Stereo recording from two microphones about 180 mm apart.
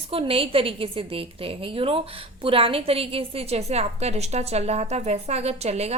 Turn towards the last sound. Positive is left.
turn(degrees=-35)  # may be behind; listen again after turning